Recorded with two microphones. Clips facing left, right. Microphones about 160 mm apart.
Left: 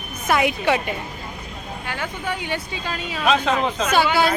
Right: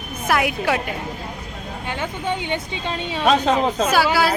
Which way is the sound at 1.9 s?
20° right (ahead or behind).